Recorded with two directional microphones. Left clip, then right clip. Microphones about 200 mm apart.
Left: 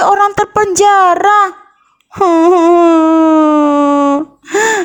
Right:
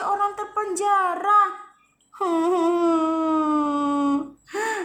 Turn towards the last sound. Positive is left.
turn(degrees=45)  # may be behind; listen again after turning